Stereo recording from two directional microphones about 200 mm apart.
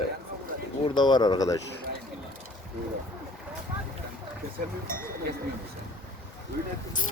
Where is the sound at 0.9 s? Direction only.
20° left (ahead or behind).